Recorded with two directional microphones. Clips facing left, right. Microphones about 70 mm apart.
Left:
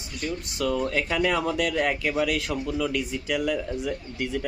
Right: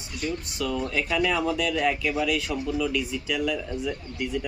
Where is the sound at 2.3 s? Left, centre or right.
Left.